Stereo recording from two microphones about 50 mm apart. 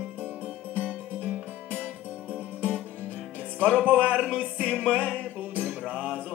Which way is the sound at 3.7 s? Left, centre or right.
Right.